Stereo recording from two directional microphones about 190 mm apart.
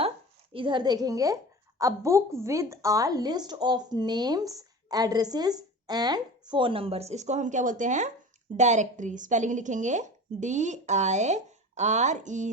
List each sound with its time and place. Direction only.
0.5 s a woman's voice: 25° right (ahead or behind)